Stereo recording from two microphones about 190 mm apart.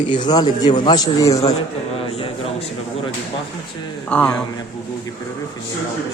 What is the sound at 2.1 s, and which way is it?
Speech, 30° left (ahead or behind).